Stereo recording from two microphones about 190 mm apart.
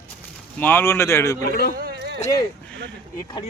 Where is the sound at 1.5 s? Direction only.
55° left (ahead or behind).